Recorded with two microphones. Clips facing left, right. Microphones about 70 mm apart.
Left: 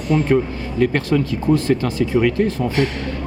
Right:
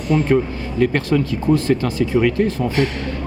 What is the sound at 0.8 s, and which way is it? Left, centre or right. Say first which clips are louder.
Speech: even; centre.